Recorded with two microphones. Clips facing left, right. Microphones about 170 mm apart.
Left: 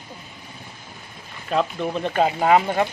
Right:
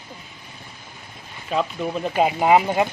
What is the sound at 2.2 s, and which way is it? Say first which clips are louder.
Speech: right 1 dB; 15° right (ahead or behind).